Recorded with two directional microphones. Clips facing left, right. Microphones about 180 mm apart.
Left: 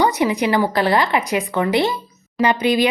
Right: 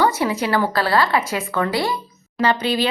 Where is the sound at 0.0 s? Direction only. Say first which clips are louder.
Left 2 dB; 15° left (ahead or behind).